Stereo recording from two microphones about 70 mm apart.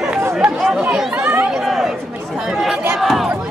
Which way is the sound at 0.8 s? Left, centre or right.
Centre.